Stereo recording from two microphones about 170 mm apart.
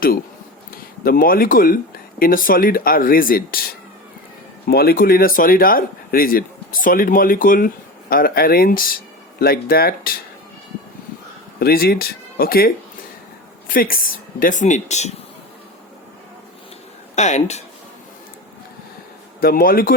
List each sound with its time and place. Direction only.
1.0 s speech: 60° left (ahead or behind)
4.6 s speech: 65° left (ahead or behind)
11.6 s speech: 65° left (ahead or behind); by 15.1 s 40° left (ahead or behind)
17.2 s speech: 40° left (ahead or behind)
19.4 s speech: 60° left (ahead or behind)